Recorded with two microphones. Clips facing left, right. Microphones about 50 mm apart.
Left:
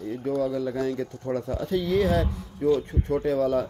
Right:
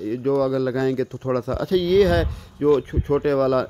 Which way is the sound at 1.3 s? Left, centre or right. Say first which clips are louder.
Right 5 dB; right.